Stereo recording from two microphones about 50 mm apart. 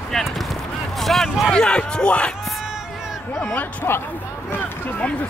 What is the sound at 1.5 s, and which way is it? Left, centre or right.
Speech, centre.